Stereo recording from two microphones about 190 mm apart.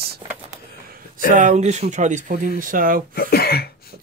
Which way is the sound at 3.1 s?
55° left (ahead or behind).